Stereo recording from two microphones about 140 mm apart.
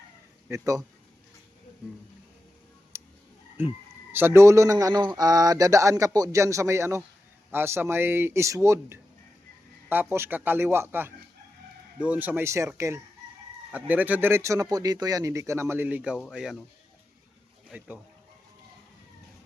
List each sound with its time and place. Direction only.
0.4 s speech: 20° right (ahead or behind)
4.1 s a man's voice: 15° right (ahead or behind)
13.7 s a man's voice: 10° right (ahead or behind)
17.7 s speech: 10° right (ahead or behind)